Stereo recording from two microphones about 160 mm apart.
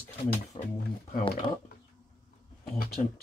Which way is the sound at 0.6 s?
45° left (ahead or behind).